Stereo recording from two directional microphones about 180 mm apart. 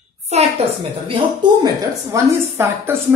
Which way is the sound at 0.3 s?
35° right (ahead or behind).